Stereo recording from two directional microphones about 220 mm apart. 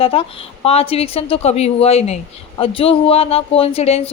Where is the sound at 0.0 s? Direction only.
25° left (ahead or behind).